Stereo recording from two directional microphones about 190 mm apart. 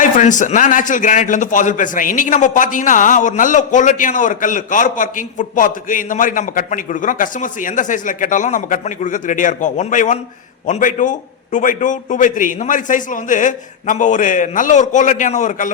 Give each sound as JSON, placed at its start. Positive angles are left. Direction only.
{"t": 0.0, "sound": "a man's voice", "side_deg": 40}